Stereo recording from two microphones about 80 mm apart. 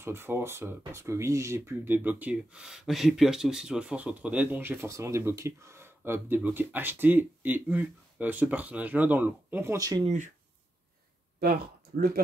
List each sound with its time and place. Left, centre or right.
0.0 s speech: right
2.0 s speech: centre
4.8 s speech: right
9.8 s speech: right